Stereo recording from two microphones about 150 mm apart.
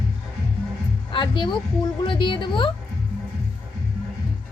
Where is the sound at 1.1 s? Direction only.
35° left (ahead or behind).